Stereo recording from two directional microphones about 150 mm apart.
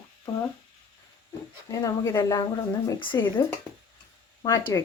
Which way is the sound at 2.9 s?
35° left (ahead or behind).